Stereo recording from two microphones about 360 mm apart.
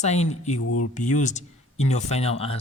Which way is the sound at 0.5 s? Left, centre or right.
Left.